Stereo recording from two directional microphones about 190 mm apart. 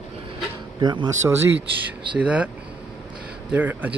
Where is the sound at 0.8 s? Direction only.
25° right (ahead or behind).